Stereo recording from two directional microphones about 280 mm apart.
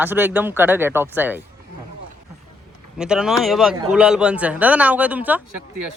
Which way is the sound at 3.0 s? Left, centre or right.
Centre.